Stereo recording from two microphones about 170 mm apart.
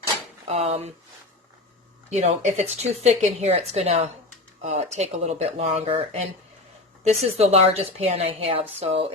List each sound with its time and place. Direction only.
0.4 s speech: 40° right (ahead or behind)
2.0 s speech: 40° right (ahead or behind)